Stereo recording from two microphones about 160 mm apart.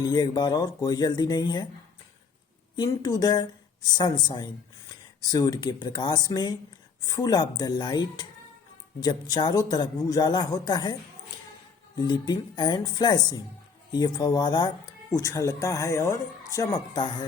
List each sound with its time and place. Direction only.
0.0 s speech: 25° left (ahead or behind)
2.7 s speech: 25° left (ahead or behind)
11.9 s speech: 30° left (ahead or behind)